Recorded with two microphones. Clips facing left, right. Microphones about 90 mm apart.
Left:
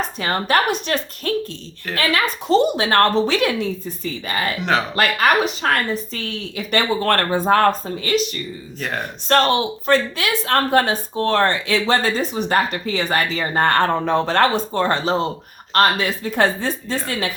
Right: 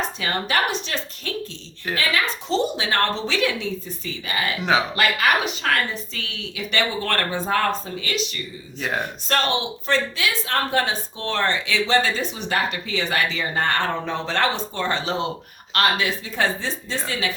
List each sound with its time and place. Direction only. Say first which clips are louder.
0.2 s a woman's voice: left 5 dB; 40° left (ahead or behind)
4.3 s a woman's voice: left 1 dB; 40° left (ahead or behind)
8.8 s speech: right 1 dB; 5° right (ahead or behind)
9.3 s a woman's voice: left 7 dB; 45° left (ahead or behind)
16.3 s a woman's voice: left 5 dB; 55° left (ahead or behind)